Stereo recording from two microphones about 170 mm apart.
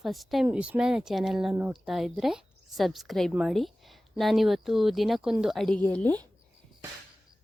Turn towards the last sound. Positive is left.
turn(degrees=10)  # may be behind; listen again after turning